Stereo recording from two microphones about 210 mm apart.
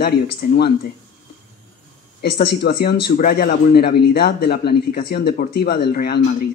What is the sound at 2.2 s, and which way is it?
Speech, 50° left (ahead or behind).